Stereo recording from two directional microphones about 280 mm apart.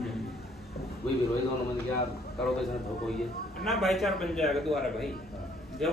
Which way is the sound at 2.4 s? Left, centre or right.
Centre.